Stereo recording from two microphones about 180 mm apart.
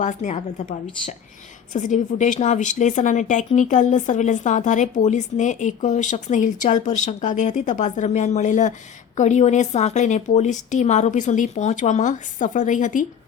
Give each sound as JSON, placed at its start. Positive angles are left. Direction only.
{"t": 0.0, "sound": "a woman's voice", "side_deg": 45}
{"t": 1.7, "sound": "a woman's voice", "side_deg": 45}